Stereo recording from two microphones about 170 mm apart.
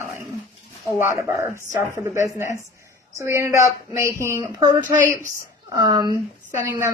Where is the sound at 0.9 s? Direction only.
15° right (ahead or behind).